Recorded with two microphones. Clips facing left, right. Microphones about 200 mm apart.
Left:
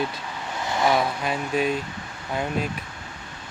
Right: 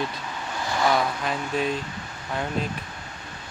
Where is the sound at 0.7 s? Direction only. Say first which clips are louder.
Left 1 dB; 20° left (ahead or behind).